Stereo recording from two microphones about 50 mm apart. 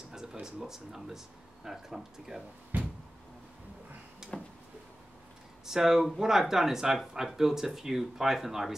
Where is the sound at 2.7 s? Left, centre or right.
Right.